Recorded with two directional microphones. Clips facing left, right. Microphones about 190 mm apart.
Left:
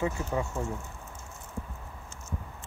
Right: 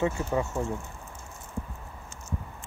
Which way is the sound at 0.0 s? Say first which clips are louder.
Right 3 dB; 25° right (ahead or behind).